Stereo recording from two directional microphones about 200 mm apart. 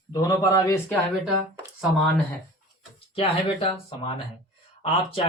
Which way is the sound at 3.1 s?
25° left (ahead or behind).